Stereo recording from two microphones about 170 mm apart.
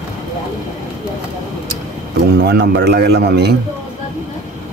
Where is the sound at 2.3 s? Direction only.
70° right (ahead or behind).